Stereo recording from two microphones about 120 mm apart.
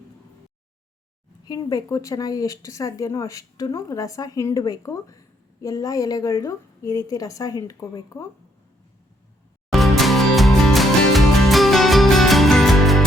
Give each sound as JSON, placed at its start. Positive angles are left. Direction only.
{"t": 1.5, "sound": "speech", "side_deg": 30}
{"t": 9.7, "sound": "music", "side_deg": 0}